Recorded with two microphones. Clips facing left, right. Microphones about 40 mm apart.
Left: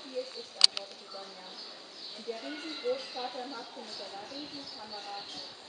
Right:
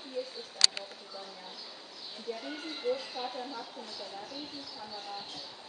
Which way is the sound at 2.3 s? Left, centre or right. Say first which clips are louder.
Even; centre.